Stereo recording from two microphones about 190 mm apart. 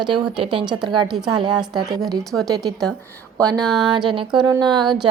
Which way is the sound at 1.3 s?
25° right (ahead or behind).